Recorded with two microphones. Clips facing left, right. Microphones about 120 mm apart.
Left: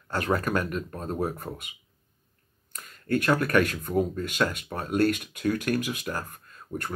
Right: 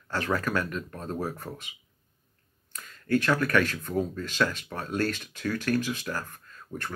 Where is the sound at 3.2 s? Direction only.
20° left (ahead or behind).